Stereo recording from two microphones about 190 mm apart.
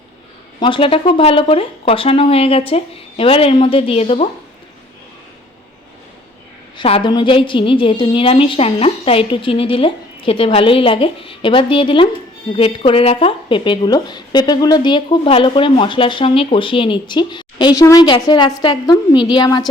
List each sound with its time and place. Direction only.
0.6 s speech: 30° left (ahead or behind)
6.7 s speech: 30° left (ahead or behind)